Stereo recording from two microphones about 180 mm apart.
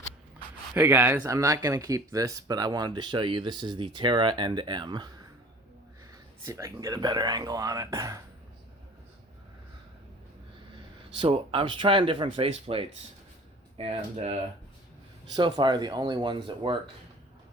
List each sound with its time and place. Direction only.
0.7 s speech: 10° right (ahead or behind)
6.4 s speech: 15° right (ahead or behind)
11.2 s speech: 30° right (ahead or behind)
15.4 s speech: 25° right (ahead or behind)